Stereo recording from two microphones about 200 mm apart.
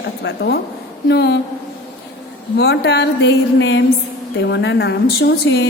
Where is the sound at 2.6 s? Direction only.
60° left (ahead or behind).